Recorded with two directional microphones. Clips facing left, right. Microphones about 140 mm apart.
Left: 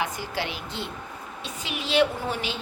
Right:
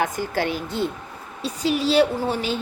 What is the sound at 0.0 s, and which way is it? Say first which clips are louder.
A woman's voice: right 6 dB; 45° right (ahead or behind).